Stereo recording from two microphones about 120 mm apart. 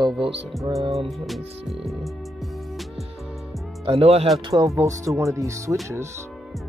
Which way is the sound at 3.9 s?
55° right (ahead or behind).